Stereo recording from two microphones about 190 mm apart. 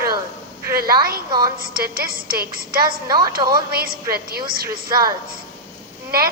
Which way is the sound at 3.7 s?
55° right (ahead or behind).